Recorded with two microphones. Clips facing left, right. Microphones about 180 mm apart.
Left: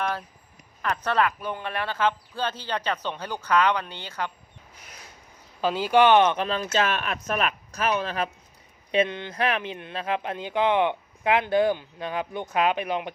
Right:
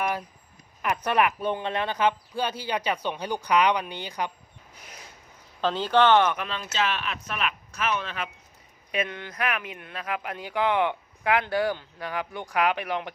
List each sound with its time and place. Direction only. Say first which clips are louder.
0.0 s speech: right 1 dB; 15° right (ahead or behind)
1.4 s speech: right 3 dB; 25° right (ahead or behind)
5.5 s speech: left 2 dB; 10° left (ahead or behind)
6.3 s speech: left 5 dB; 35° left (ahead or behind)
8.9 s speech: left 6 dB; 25° left (ahead or behind)